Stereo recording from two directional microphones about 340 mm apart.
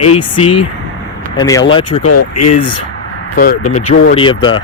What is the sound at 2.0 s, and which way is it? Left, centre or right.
Speech, left.